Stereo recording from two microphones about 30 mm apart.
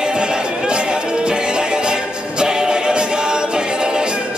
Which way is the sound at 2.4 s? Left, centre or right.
Right.